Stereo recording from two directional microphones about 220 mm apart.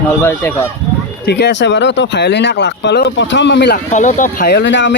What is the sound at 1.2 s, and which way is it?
Speech, 50° left (ahead or behind).